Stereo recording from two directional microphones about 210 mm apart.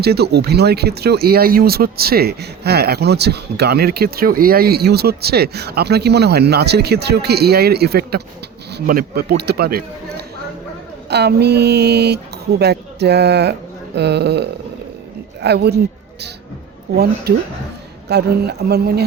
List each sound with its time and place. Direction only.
0.0 s speech: 50° right (ahead or behind)
16.9 s speech: 50° right (ahead or behind)